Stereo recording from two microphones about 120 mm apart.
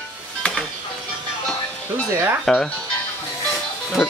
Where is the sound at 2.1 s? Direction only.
20° right (ahead or behind).